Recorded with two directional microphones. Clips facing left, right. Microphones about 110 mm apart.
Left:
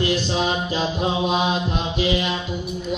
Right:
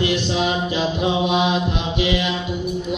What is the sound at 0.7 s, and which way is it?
Music, 35° left (ahead or behind).